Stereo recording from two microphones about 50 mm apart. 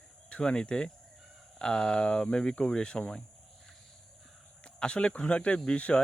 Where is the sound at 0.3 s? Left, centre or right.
Centre.